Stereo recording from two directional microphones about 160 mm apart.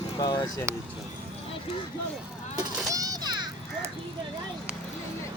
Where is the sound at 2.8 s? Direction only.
20° right (ahead or behind).